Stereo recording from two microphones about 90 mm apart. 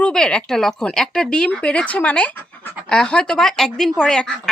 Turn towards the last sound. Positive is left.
turn(degrees=5)  # may be behind; listen again after turning